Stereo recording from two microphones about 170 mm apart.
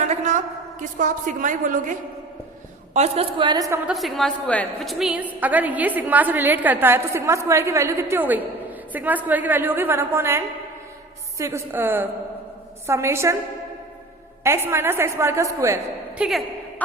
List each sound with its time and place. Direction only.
0.0 s a sound: 45° right (ahead or behind)
2.9 s a woman's voice: 35° right (ahead or behind); by 3.8 s 20° right (ahead or behind)
3.8 s a woman's voice: centre (ahead or behind); by 13.3 s 15° right (ahead or behind)
14.4 s a woman's voice: 15° right (ahead or behind)